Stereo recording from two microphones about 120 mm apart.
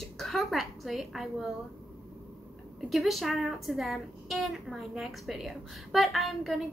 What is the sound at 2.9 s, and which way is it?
A woman's voice, centre (ahead or behind).